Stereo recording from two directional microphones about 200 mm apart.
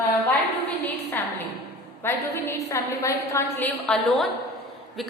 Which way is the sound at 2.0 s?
10° left (ahead or behind).